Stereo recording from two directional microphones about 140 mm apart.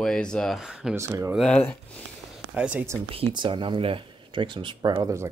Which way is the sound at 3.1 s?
40° right (ahead or behind).